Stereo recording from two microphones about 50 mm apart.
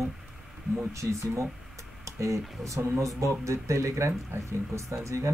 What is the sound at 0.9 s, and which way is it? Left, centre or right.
Speech, right.